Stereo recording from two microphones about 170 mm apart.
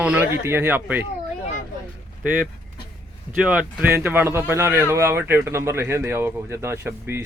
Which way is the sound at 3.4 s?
5° right (ahead or behind).